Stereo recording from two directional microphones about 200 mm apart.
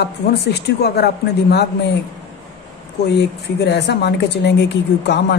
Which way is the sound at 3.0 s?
55° left (ahead or behind).